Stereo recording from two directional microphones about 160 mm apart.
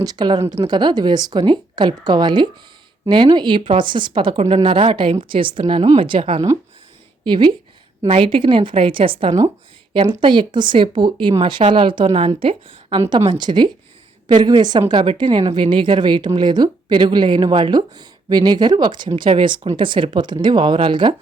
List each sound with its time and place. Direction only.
0.0 s a woman's voice: 25° right (ahead or behind)